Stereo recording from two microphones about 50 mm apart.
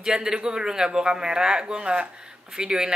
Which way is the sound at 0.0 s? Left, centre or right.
Centre.